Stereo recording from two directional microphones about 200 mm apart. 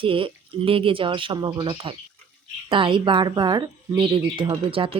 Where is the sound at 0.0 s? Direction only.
25° right (ahead or behind).